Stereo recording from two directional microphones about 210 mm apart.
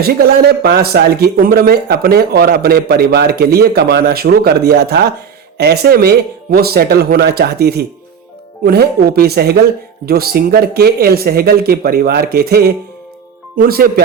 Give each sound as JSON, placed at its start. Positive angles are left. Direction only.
{"t": 0.0, "sound": "speech", "side_deg": -50}